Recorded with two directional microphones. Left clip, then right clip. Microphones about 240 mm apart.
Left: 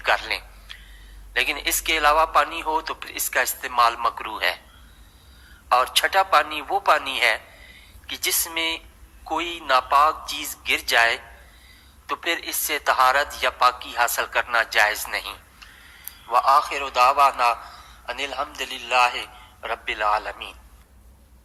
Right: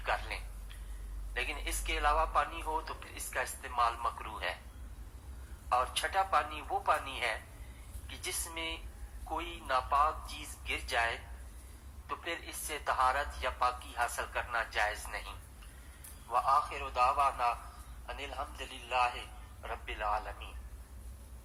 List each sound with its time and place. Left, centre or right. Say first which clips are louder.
0.0 s a sound: left 14 dB; left
1.3 s a man's voice: left 15 dB; left
5.6 s a man's voice: left 13 dB; left